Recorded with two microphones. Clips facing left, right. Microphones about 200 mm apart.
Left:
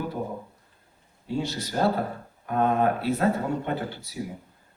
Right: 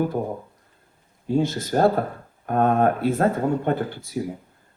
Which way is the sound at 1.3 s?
50° right (ahead or behind).